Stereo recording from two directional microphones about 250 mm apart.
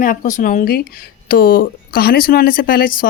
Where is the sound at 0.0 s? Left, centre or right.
Left.